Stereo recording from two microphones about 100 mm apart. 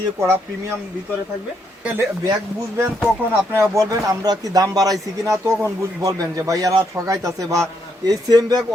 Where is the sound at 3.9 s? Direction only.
40° right (ahead or behind).